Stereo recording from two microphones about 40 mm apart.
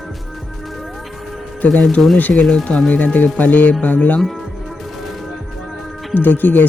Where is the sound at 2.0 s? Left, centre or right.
Centre.